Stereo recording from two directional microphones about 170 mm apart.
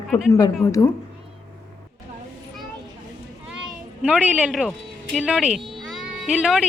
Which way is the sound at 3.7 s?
5° right (ahead or behind).